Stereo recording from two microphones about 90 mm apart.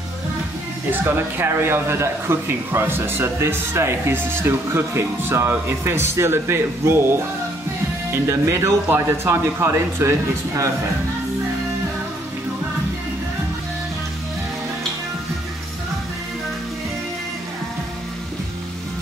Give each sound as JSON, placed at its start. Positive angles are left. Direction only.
{"t": 1.0, "sound": "speech", "side_deg": -25}
{"t": 8.1, "sound": "speech", "side_deg": -30}